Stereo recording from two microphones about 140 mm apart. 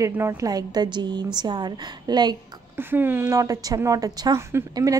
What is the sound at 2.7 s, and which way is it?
A woman's voice, 15° right (ahead or behind).